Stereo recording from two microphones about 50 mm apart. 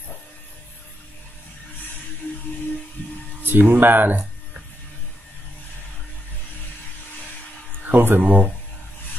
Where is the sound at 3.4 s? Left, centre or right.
Right.